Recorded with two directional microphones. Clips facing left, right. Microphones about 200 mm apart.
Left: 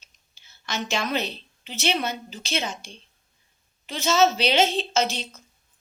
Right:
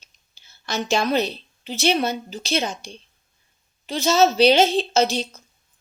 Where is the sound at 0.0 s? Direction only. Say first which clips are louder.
Right 2 dB; 35° right (ahead or behind).